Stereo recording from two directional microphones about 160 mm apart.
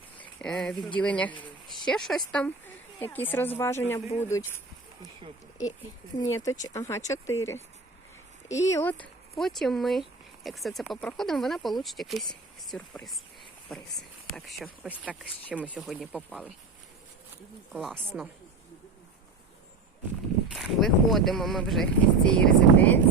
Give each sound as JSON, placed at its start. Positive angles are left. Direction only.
{"t": 0.2, "sound": "a sound", "side_deg": 5}
{"t": 0.9, "sound": "a woman's voice", "side_deg": 10}
{"t": 6.1, "sound": "a woman's voice", "side_deg": 20}
{"t": 14.3, "sound": "speech", "side_deg": 0}
{"t": 17.7, "sound": "speech", "side_deg": 0}
{"t": 20.5, "sound": "speech", "side_deg": 0}